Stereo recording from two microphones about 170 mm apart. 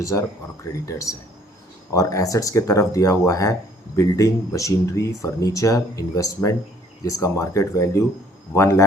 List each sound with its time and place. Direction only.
0.0 s speech: 20° left (ahead or behind)